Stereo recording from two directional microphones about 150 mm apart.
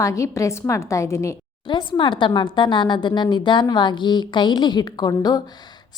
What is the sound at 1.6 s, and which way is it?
A woman's voice, 30° left (ahead or behind).